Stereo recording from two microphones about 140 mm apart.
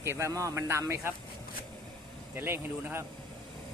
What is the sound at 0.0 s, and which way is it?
Speech, 20° right (ahead or behind).